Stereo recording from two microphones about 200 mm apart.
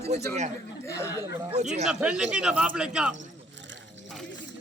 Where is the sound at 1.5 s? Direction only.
35° right (ahead or behind).